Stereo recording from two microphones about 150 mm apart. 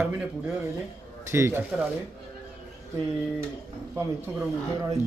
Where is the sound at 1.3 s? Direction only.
15° right (ahead or behind).